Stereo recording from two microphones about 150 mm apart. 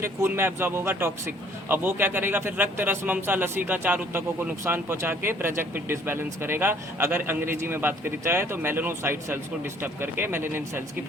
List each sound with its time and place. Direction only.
0.0 s speech: 15° right (ahead or behind)